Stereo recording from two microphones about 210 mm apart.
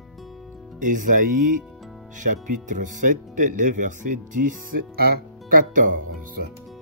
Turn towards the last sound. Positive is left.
turn(degrees=-40)  # may be behind; listen again after turning